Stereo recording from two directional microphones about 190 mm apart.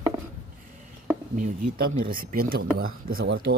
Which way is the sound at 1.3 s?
45° right (ahead or behind).